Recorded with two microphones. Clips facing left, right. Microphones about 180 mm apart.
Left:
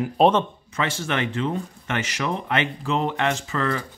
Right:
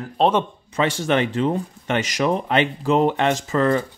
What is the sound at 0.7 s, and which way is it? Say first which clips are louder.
Speech: right 6 dB; 35° right (ahead or behind).